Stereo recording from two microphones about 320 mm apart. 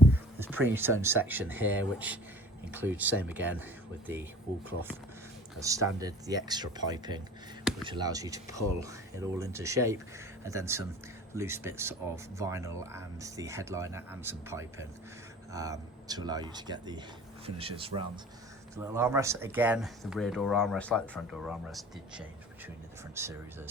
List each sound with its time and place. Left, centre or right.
0.3 s a sound: centre
1.0 s speech: centre
5.5 s speech: centre